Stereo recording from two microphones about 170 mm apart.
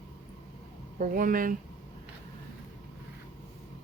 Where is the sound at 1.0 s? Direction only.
55° right (ahead or behind).